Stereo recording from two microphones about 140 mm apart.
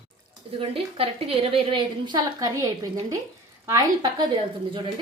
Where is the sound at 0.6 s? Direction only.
40° right (ahead or behind).